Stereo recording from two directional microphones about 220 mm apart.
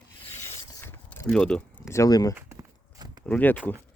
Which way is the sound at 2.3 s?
15° right (ahead or behind).